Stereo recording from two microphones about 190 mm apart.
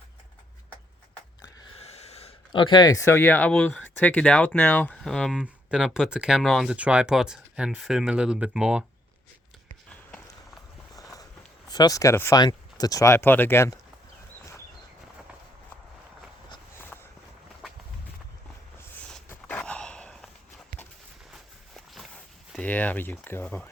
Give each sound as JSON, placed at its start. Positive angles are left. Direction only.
{"t": 1.8, "sound": "speech", "side_deg": 35}
{"t": 10.9, "sound": "a sound", "side_deg": 20}
{"t": 11.7, "sound": "speech", "side_deg": 20}
{"t": 16.7, "sound": "walk", "side_deg": 10}
{"t": 19.1, "sound": "walk", "side_deg": 5}
{"t": 21.8, "sound": "a sound", "side_deg": 0}